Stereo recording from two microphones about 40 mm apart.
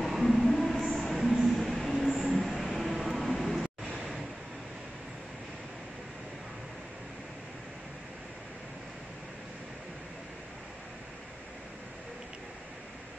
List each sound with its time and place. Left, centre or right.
0.0 s a sound: centre
0.9 s music: centre
1.5 s train: centre
3.6 s vehicle: right